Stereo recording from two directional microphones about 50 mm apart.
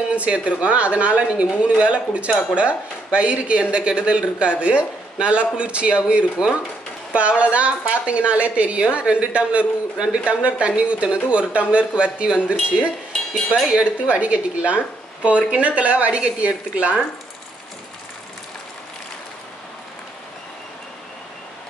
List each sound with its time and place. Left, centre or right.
0.1 s speech: right
13.1 s dishes: centre
13.7 s speech: right